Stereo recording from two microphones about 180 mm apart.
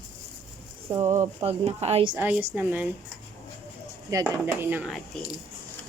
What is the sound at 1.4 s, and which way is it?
Speech, 35° right (ahead or behind).